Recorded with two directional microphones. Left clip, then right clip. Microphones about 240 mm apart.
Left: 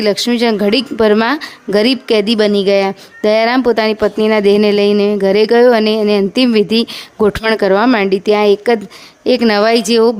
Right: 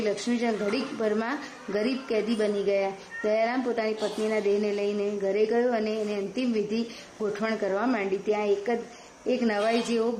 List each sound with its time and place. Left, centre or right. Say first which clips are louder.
0.0 s a woman's voice: left 15 dB; left